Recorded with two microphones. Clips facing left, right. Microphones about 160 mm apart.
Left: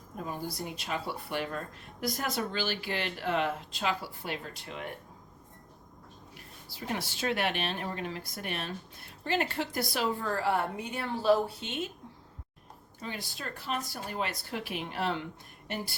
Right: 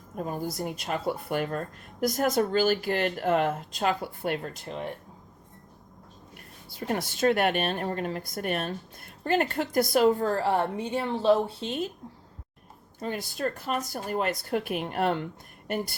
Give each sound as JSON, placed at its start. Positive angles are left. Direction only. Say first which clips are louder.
{"t": 0.9, "sound": "a woman's voice", "louder": "right 6 dB", "side_deg": -45}
{"t": 4.6, "sound": "a woman's voice", "louder": "right 6 dB", "side_deg": -35}
{"t": 6.3, "sound": "a woman's voice", "louder": "right 2 dB", "side_deg": -50}
{"t": 13.0, "sound": "a woman's voice", "louder": "right 9 dB", "side_deg": -45}